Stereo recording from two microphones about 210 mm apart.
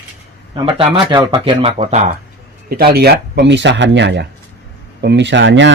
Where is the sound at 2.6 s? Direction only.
45° right (ahead or behind).